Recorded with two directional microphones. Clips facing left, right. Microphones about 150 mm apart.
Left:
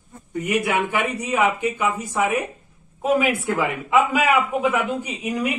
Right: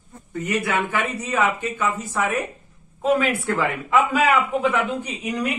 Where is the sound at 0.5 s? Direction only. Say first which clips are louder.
Left 2 dB; 15° left (ahead or behind).